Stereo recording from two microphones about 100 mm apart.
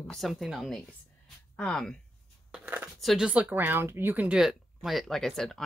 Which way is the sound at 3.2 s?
15° right (ahead or behind).